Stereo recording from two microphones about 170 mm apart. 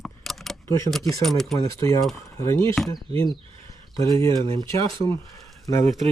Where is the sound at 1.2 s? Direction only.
Centre (ahead or behind).